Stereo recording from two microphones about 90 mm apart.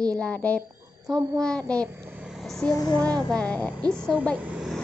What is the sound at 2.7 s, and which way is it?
Child singing, 45° left (ahead or behind).